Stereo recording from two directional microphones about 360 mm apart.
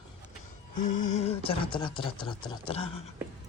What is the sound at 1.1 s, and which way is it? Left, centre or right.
Speech, centre.